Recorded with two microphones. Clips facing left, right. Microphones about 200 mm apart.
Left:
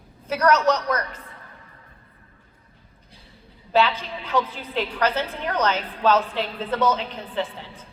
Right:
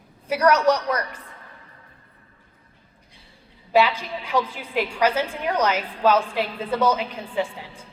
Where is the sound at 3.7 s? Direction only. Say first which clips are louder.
Right 1 dB; 10° right (ahead or behind).